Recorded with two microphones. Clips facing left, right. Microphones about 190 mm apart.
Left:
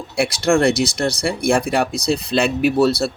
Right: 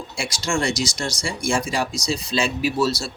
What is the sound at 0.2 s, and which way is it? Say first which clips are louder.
A man's voice: left 9 dB; 60° left (ahead or behind).